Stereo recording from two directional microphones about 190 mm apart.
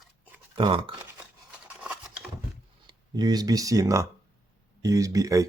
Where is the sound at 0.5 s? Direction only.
25° right (ahead or behind).